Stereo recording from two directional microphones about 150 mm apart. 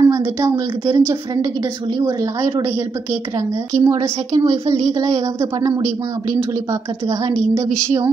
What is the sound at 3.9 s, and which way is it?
Speech, 20° right (ahead or behind).